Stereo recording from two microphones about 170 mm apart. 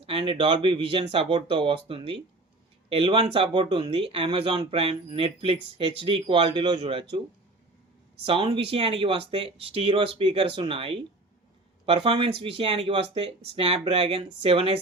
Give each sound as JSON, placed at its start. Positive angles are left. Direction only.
{"t": 0.0, "sound": "speech", "side_deg": -35}
{"t": 8.2, "sound": "speech", "side_deg": -35}